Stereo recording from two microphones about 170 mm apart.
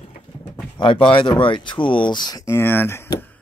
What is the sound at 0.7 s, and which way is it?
Speech, 30° left (ahead or behind).